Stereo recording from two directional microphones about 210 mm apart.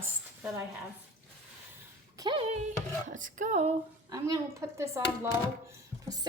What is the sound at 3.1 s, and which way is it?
Speech, 40° right (ahead or behind).